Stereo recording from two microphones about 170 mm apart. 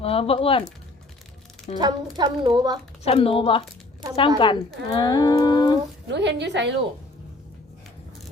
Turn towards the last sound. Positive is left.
turn(degrees=-90)